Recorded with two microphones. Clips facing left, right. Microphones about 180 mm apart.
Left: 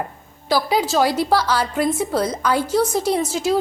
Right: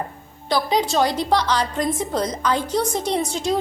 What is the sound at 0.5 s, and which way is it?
A woman's voice, 5° left (ahead or behind).